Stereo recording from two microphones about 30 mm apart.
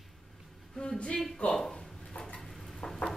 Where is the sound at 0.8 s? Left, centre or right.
Left.